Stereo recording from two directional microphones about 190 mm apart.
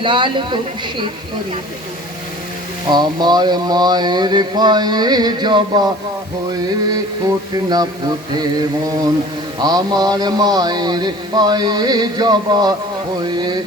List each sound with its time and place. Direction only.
0.0 s a man's voice: 25° right (ahead or behind)
2.9 s a man's voice: 20° right (ahead or behind)
7.5 s a man's voice: 20° right (ahead or behind)
9.6 s a man's voice: 20° right (ahead or behind)